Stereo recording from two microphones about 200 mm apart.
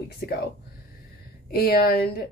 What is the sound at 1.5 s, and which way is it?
Speech, 50° left (ahead or behind).